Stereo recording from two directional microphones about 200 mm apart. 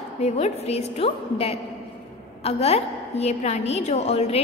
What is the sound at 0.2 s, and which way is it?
A woman's voice, 30° left (ahead or behind).